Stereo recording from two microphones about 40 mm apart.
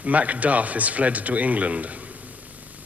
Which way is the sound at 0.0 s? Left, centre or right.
Right.